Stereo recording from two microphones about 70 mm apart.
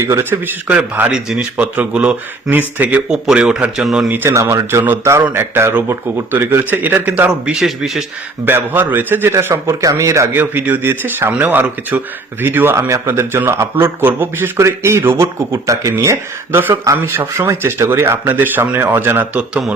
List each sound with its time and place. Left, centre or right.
0.0 s speech: right
1.1 s speech: centre
1.5 s speech: right
3.1 s speech: centre
4.3 s speech: right
5.3 s a man's voice: right; by 8.0 s centre
8.4 s a man's voice: right
9.8 s speech: right
10.3 s a man's voice: right
14.6 s speech: right
16.5 s a man's voice: right
17.3 s a man's voice: right
18.3 s speech: right
19.3 s speech: centre